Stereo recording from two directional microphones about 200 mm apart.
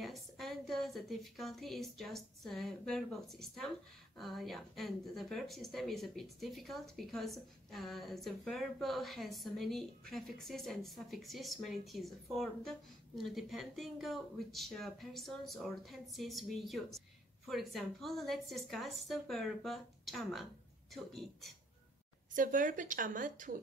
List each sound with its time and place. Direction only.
0.0 s speech: centre (ahead or behind)
22.3 s speech: 40° right (ahead or behind)